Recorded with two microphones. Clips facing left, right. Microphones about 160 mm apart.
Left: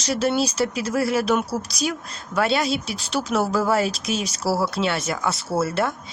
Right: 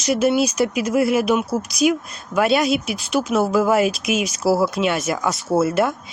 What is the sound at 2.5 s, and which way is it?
Speech, 25° left (ahead or behind).